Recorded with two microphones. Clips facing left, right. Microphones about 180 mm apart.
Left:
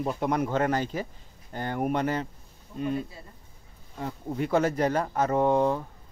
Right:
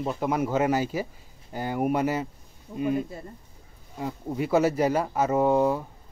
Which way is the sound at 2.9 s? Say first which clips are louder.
Right 4 dB; 50° right (ahead or behind).